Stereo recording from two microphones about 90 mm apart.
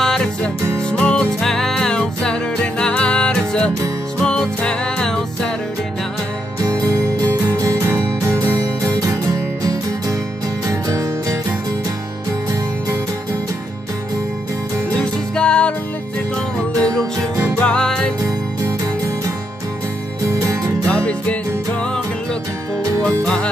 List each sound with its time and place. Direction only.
0.0 s music: 5° left (ahead or behind)
6.6 s music: 35° right (ahead or behind)
15.0 s music: 10° left (ahead or behind)
17.6 s music: 10° left (ahead or behind)
20.2 s music: 30° right (ahead or behind)
20.9 s music: 15° left (ahead or behind)
23.0 s music: 10° left (ahead or behind)